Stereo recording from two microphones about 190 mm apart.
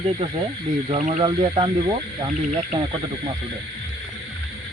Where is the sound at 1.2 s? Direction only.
20° right (ahead or behind).